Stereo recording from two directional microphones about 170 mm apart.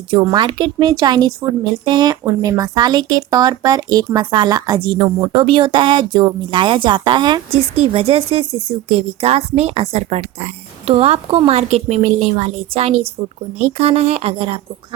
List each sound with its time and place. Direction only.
0.1 s speech: 25° right (ahead or behind)
5.3 s a woman's voice: 30° right (ahead or behind)